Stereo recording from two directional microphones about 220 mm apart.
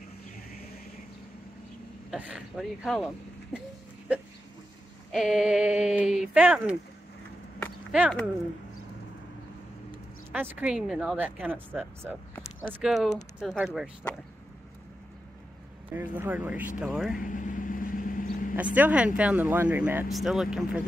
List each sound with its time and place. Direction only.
2.0 s speech: 5° right (ahead or behind)
5.1 s speech: centre (ahead or behind)
7.9 s speech: centre (ahead or behind)
10.3 s speech: 10° right (ahead or behind)
15.9 s speech: 10° right (ahead or behind)
17.2 s vehicle: 35° left (ahead or behind)
18.8 s speech: 5° right (ahead or behind)